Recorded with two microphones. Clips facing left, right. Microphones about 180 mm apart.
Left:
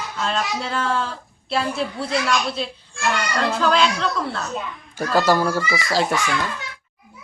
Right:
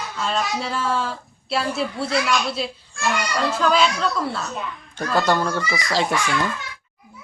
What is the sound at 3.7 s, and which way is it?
Speech, centre (ahead or behind).